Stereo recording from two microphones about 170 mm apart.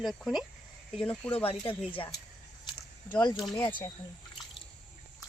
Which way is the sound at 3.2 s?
25° left (ahead or behind).